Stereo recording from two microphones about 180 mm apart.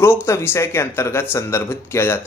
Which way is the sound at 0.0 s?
15° left (ahead or behind).